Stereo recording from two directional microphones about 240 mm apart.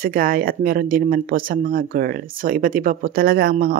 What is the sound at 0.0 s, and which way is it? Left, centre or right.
Speech, right.